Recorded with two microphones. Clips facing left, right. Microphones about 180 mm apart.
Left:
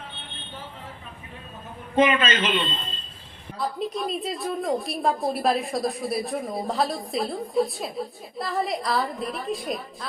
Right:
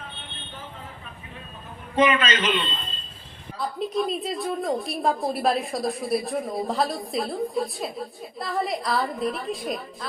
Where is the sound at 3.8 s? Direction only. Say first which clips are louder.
Right 6 dB; centre (ahead or behind).